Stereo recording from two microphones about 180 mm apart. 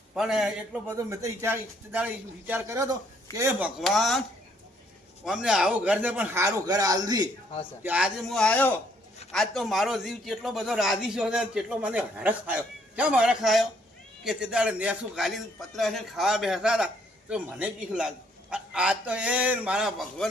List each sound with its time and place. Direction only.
0.1 s a man's voice: centre (ahead or behind)
0.9 s a man's voice: 15° right (ahead or behind)
3.8 s a man's voice: centre (ahead or behind); by 7.3 s 20° right (ahead or behind)
7.8 s a man's voice: 10° right (ahead or behind)